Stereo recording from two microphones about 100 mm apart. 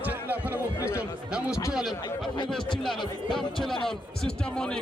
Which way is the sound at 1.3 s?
10° right (ahead or behind).